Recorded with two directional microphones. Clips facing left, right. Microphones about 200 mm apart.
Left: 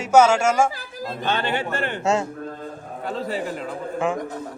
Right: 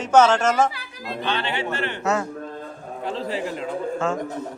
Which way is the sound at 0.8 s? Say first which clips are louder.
Left 1 dB; 45° left (ahead or behind).